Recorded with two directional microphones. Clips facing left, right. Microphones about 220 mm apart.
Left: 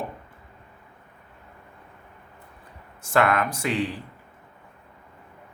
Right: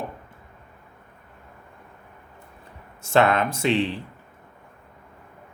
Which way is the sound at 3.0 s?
25° right (ahead or behind).